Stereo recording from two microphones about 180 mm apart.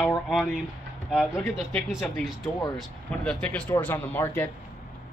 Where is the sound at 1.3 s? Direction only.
10° left (ahead or behind).